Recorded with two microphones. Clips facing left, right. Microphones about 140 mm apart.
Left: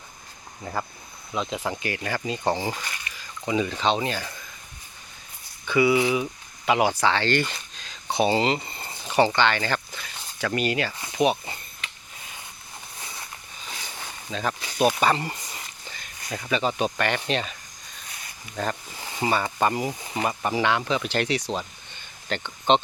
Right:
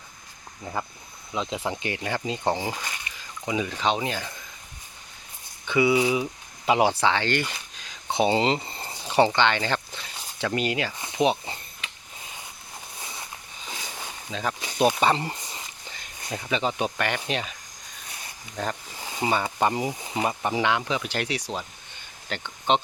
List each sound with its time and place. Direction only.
0.6 s speech: 10° right (ahead or behind)
1.5 s speech: 25° right (ahead or behind)
5.6 s speech: 20° right (ahead or behind)
6.7 s speech: 30° right (ahead or behind)
7.1 s speech: 15° right (ahead or behind)
8.9 s speech: 15° right (ahead or behind)
10.0 s a sound: 25° right (ahead or behind)
13.7 s a sound: 20° right (ahead or behind)
16.4 s speech: 20° right (ahead or behind)
18.6 s speech: 10° right (ahead or behind)